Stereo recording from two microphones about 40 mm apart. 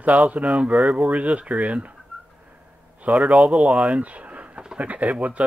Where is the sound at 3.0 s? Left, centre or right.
Right.